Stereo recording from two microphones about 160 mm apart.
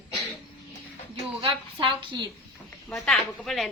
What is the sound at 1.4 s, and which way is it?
Speech, 35° right (ahead or behind).